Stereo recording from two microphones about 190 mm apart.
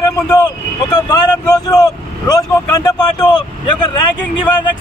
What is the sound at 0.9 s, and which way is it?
Speech, 20° left (ahead or behind).